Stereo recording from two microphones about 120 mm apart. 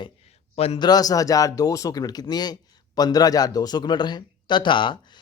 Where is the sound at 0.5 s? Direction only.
55° left (ahead or behind).